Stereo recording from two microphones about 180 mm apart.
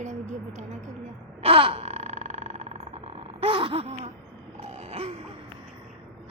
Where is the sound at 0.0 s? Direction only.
40° right (ahead or behind).